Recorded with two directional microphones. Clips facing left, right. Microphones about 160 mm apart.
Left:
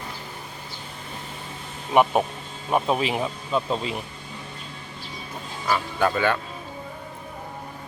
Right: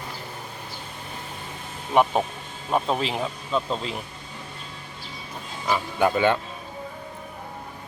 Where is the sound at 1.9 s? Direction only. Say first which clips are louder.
Left 1 dB; 10° left (ahead or behind).